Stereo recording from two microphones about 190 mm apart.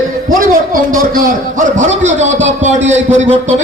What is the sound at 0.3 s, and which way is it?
A man's voice, 45° right (ahead or behind).